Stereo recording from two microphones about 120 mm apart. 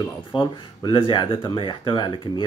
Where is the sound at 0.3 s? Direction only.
40° left (ahead or behind).